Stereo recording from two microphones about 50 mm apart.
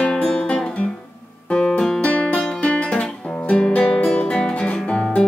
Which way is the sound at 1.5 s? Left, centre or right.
Centre.